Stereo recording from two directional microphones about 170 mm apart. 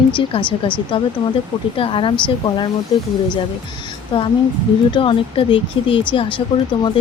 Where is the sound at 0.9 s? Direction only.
30° left (ahead or behind).